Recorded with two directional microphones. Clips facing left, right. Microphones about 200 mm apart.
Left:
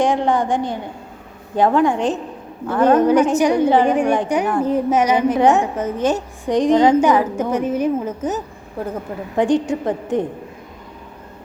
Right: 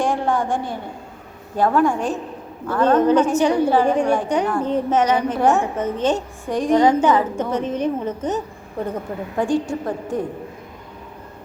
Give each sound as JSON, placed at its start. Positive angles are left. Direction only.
{"t": 0.0, "sound": "a woman's voice", "side_deg": 20}
{"t": 6.5, "sound": "a woman's voice", "side_deg": 20}
{"t": 9.4, "sound": "a woman's voice", "side_deg": 20}